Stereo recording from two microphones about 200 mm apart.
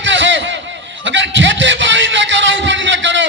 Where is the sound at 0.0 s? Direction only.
65° right (ahead or behind).